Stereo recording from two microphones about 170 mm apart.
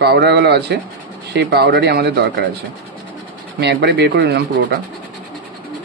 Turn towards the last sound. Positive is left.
turn(degrees=-80)